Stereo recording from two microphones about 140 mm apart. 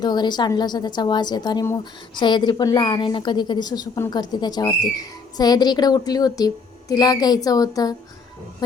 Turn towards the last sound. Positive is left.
turn(degrees=25)  # may be behind; listen again after turning